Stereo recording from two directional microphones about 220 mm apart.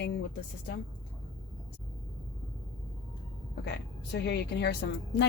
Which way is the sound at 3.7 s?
50° left (ahead or behind).